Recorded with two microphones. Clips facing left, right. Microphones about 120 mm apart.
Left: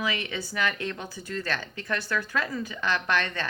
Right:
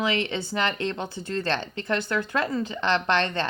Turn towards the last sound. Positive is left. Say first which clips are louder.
# right 4 dB
turn(degrees=-25)  # may be behind; listen again after turning